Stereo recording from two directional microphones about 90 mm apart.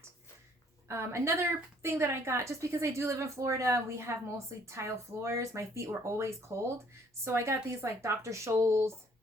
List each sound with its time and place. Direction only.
0.9 s a woman's voice: 30° right (ahead or behind)